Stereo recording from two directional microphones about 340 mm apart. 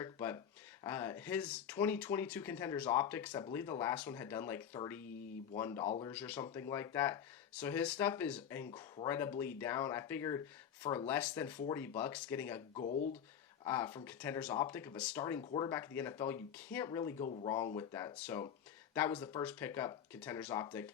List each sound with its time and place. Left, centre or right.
0.0 s speech: centre
12.7 s speech: left
13.7 s speech: centre